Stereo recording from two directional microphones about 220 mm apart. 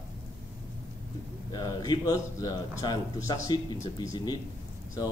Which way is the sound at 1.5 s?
20° left (ahead or behind).